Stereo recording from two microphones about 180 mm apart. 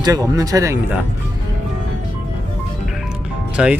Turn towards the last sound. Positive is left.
turn(degrees=-5)  # may be behind; listen again after turning